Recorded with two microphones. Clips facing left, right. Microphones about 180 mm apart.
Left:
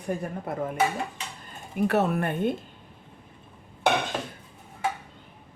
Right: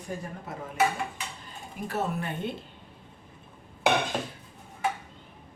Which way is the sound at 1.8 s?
65° left (ahead or behind).